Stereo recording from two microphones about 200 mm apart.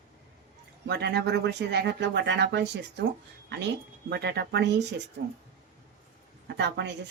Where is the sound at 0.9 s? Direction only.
55° right (ahead or behind).